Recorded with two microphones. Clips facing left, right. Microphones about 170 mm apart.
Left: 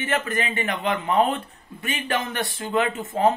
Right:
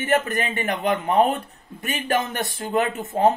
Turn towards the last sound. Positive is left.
turn(degrees=-40)  # may be behind; listen again after turning